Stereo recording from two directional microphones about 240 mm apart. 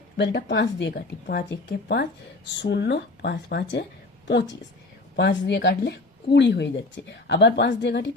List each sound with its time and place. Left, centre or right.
0.2 s speech: left
5.1 s speech: left